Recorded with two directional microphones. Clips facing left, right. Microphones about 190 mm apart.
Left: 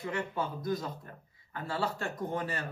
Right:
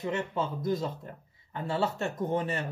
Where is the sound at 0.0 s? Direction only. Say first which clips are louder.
Right 3 dB; 25° right (ahead or behind).